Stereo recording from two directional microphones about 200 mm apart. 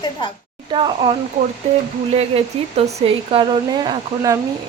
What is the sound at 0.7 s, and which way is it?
Speech, 25° right (ahead or behind).